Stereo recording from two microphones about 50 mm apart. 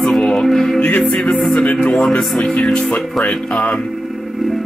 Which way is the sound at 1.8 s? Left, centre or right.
Centre.